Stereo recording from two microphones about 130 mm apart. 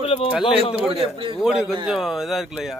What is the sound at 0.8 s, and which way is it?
Speech, 45° right (ahead or behind).